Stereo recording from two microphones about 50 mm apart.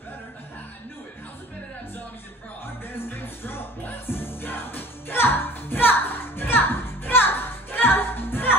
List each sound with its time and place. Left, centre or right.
2.6 s music: left